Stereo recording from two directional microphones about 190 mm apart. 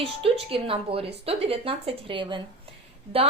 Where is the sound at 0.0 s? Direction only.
30° right (ahead or behind).